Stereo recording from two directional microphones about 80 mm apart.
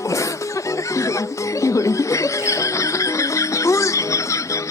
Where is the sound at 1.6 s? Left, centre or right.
Left.